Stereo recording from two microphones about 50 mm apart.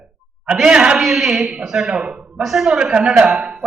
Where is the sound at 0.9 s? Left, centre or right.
Centre.